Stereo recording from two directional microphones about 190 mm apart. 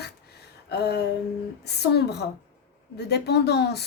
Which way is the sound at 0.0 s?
60° left (ahead or behind).